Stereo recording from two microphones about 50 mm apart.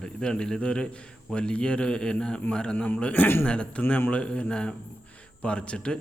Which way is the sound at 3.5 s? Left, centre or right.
Left.